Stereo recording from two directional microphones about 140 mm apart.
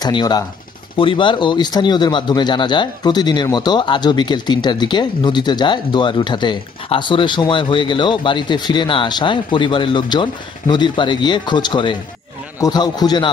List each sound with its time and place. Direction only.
0.0 s a man's voice: 30° left (ahead or behind)